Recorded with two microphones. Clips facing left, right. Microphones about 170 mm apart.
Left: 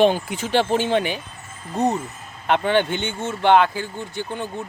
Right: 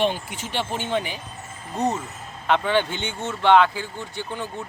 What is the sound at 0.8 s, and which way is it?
Speech, 80° left.